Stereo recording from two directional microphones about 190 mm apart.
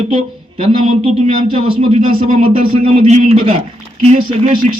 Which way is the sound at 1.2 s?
30° right (ahead or behind).